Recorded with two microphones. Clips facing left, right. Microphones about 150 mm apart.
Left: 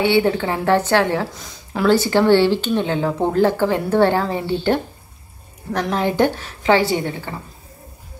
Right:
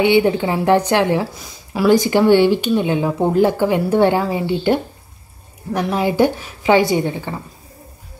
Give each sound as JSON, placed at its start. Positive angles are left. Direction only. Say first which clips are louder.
{"t": 0.0, "sound": "a woman's voice", "louder": "right 3 dB", "side_deg": -15}